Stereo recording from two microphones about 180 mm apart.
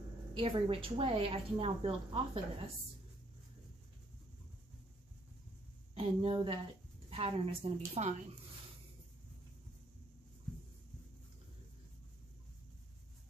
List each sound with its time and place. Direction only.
0.4 s a woman's voice: 30° right (ahead or behind)
5.9 s a woman's voice: 30° right (ahead or behind)